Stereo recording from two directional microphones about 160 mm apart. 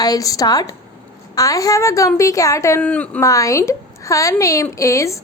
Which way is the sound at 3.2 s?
20° left (ahead or behind).